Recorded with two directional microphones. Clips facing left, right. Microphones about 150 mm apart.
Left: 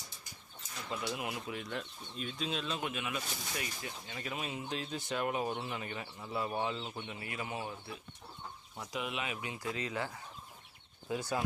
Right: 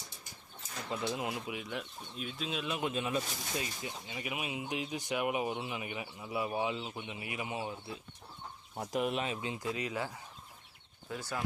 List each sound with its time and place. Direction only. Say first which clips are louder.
0.9 s speech: right 2 dB; 25° right (ahead or behind)
1.5 s speech: even; 5° right (ahead or behind)
2.6 s speech: right 3 dB; 15° right (ahead or behind)
2.9 s speech: right 5 dB; 30° right (ahead or behind)
8.7 s speech: right 6 dB; 45° right (ahead or behind); by 10.2 s 15° right (ahead or behind)
11.1 s speech: left 4 dB; 20° left (ahead or behind)